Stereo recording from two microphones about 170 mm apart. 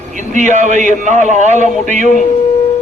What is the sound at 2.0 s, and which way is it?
Speech, 50° left (ahead or behind).